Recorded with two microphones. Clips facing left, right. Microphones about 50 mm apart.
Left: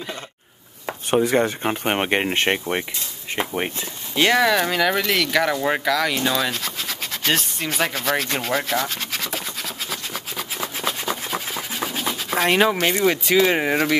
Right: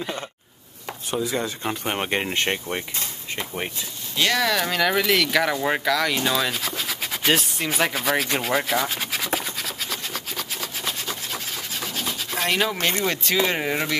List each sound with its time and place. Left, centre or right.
1.1 s speech: left
4.2 s speech: left
4.5 s speech: centre
11.1 s a sound: centre
12.8 s speech: centre